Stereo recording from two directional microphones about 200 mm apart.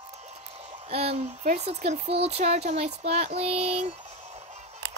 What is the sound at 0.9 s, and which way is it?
Speech, 30° right (ahead or behind).